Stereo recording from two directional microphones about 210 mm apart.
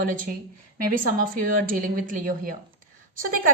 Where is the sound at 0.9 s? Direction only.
40° right (ahead or behind).